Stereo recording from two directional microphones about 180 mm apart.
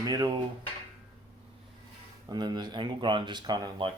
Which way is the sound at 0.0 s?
20° right (ahead or behind).